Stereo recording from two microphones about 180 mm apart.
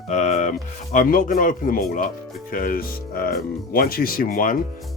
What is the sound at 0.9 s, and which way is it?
Speech, 50° left (ahead or behind).